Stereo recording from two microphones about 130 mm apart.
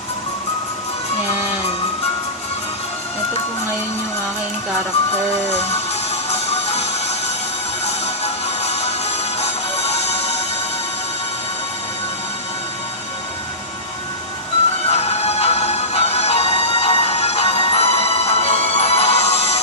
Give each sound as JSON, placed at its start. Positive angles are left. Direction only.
{"t": 5.5, "sound": "music", "side_deg": 50}
{"t": 14.8, "sound": "music", "side_deg": 55}